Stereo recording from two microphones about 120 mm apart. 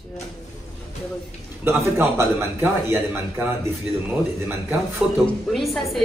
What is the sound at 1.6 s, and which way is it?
A man's voice, 20° right (ahead or behind).